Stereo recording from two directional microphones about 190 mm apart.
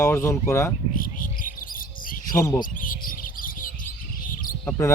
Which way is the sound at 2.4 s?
20° left (ahead or behind).